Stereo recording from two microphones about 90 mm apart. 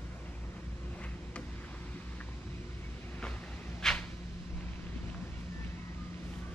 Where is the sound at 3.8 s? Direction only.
5° left (ahead or behind).